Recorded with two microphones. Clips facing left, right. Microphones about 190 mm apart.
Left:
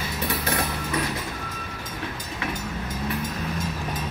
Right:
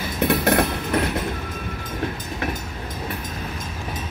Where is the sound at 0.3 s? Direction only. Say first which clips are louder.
Right 9 dB; 65° right (ahead or behind).